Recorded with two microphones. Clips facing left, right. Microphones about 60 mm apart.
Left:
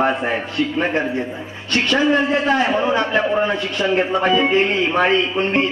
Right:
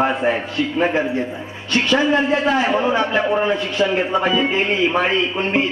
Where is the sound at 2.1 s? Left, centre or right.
Centre.